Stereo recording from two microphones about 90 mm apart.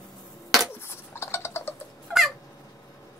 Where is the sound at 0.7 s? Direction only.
30° left (ahead or behind).